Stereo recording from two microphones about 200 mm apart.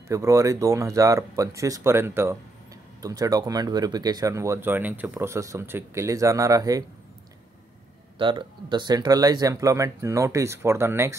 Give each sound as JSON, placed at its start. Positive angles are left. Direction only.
{"t": 0.1, "sound": "speech", "side_deg": -15}
{"t": 8.2, "sound": "speech", "side_deg": -25}